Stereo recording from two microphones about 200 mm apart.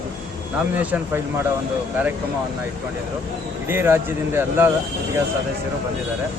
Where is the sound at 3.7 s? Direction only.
10° right (ahead or behind).